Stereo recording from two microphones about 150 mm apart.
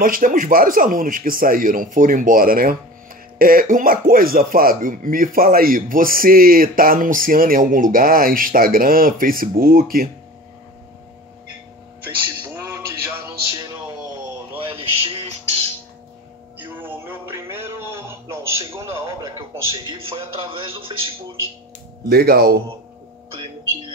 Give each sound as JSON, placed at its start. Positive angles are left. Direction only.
{"t": 0.0, "sound": "speech", "side_deg": -70}
{"t": 12.6, "sound": "music", "side_deg": -15}
{"t": 14.6, "sound": "music", "side_deg": -40}
{"t": 16.8, "sound": "a sound", "side_deg": -15}
{"t": 22.1, "sound": "speech", "side_deg": -90}